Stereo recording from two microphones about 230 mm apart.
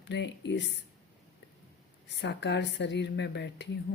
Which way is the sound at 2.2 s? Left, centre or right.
Left.